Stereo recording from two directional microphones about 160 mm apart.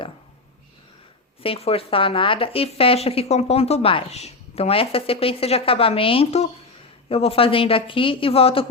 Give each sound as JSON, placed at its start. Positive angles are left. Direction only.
{"t": 1.4, "sound": "speech", "side_deg": 40}